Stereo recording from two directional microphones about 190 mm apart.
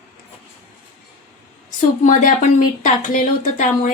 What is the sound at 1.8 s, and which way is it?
A woman's voice, 40° left (ahead or behind).